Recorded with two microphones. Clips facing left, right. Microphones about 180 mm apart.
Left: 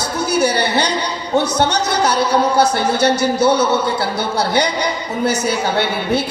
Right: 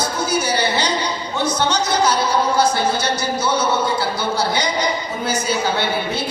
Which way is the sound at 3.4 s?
65° left (ahead or behind).